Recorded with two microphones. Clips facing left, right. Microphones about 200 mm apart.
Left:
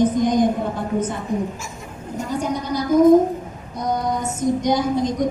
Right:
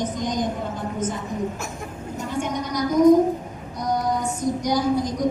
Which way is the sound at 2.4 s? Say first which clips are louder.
Left 1 dB; 35° left (ahead or behind).